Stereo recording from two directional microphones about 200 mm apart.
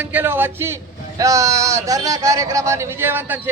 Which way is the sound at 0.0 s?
10° right (ahead or behind).